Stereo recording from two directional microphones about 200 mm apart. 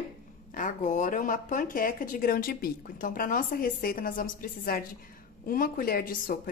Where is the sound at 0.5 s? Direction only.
40° left (ahead or behind).